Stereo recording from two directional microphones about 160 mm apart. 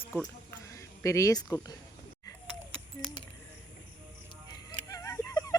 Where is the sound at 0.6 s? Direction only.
20° left (ahead or behind).